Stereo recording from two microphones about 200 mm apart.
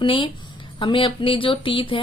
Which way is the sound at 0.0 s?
25° left (ahead or behind).